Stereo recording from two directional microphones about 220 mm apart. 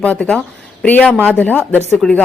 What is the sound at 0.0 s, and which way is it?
A woman's voice, 5° left (ahead or behind).